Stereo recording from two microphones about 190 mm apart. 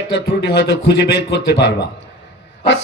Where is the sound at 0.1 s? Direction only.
60° left (ahead or behind).